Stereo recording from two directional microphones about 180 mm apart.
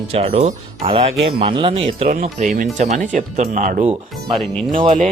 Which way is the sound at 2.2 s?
45° right (ahead or behind).